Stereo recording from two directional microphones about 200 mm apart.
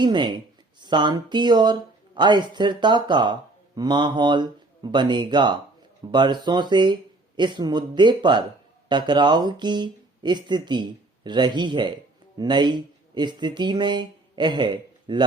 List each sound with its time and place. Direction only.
0.0 s speech: 20° right (ahead or behind)